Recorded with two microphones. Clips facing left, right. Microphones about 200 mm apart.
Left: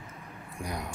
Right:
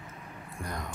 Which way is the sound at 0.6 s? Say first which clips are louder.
Left 2 dB; 10° left (ahead or behind).